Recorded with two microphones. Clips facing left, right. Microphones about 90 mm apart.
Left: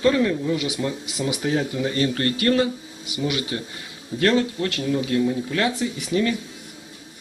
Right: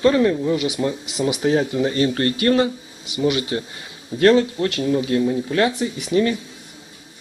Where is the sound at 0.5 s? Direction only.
20° right (ahead or behind).